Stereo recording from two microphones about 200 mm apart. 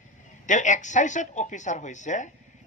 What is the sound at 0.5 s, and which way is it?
Speech, 40° left (ahead or behind).